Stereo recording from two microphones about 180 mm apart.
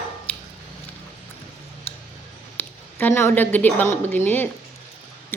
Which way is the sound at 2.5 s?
10° left (ahead or behind).